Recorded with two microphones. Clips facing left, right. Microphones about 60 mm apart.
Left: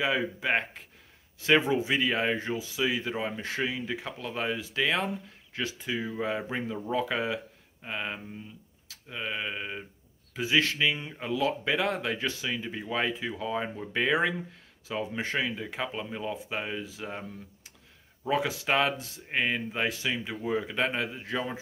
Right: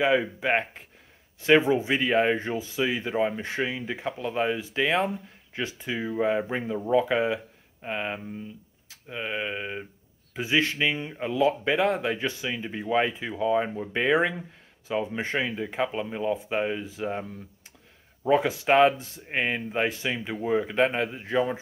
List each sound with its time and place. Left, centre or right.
0.4 s speech: right
5.9 s speech: centre
10.3 s speech: right
18.3 s speech: right